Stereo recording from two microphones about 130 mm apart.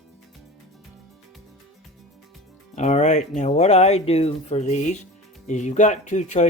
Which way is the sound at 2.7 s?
60° left (ahead or behind).